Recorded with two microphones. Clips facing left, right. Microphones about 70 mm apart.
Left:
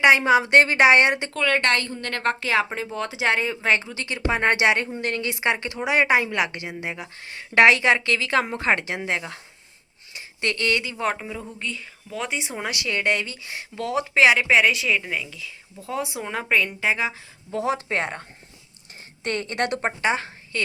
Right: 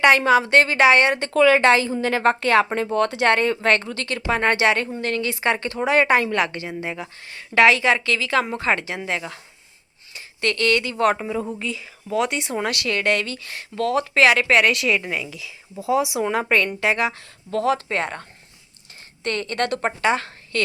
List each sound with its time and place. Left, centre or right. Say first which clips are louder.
0.0 s speech: right 1 dB; centre
1.3 s a woman's voice: right 7 dB; centre
7.3 s speech: even; left
10.2 s a sound: right 3 dB; centre
11.0 s a woman's voice: right 7 dB; centre
17.5 s speech: right 3 dB; centre
20.1 s a woman's voice: right 4 dB; centre